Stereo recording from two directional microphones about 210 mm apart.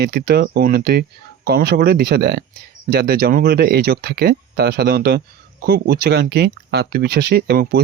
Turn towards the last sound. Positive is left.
turn(degrees=-50)  # may be behind; listen again after turning